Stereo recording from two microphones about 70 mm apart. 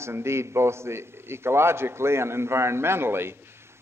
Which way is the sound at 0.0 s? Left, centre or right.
Right.